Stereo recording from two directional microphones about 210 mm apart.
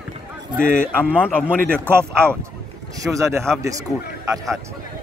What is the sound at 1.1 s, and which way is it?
Speech, 10° left (ahead or behind).